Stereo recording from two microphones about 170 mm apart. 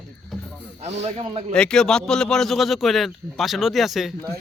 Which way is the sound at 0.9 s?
40° right (ahead or behind).